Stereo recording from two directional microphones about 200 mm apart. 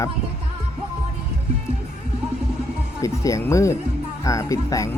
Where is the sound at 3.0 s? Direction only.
15° left (ahead or behind).